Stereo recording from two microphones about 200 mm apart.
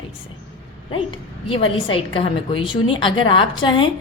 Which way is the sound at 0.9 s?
25° left (ahead or behind).